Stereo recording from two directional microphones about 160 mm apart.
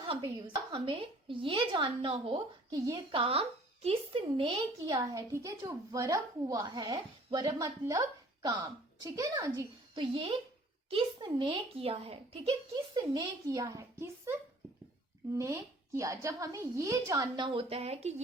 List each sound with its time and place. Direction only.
0.1 s a woman's voice: 30° right (ahead or behind)
2.6 s a woman's voice: 20° right (ahead or behind)
3.1 s a woman's voice: 35° right (ahead or behind)
4.9 s a woman's voice: 20° right (ahead or behind); by 12.5 s 40° right (ahead or behind)
12.7 s a woman's voice: 25° right (ahead or behind)
15.4 s a woman's voice: 20° right (ahead or behind); by 18.1 s 40° right (ahead or behind)